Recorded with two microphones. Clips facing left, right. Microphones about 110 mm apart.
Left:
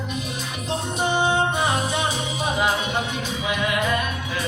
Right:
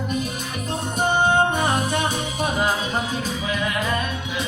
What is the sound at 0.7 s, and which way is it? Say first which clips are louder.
Music: right 1 dB; 50° right (ahead or behind).